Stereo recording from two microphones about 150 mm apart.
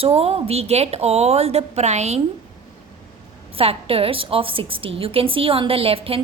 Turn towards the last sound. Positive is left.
turn(degrees=-40)  # may be behind; listen again after turning